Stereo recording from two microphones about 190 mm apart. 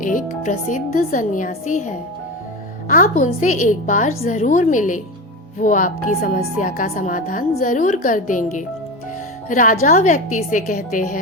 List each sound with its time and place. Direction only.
0.0 s a woman's voice: 45° left (ahead or behind)